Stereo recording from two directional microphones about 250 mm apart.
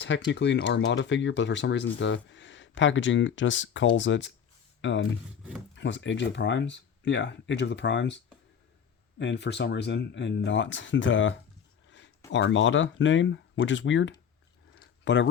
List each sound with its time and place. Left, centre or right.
0.3 s speech: left